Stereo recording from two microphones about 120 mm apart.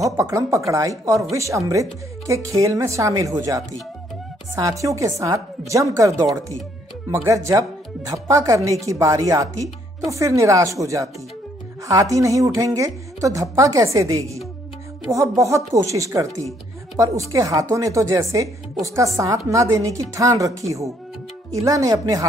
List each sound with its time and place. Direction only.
0.2 s a woman's voice: 25° right (ahead or behind)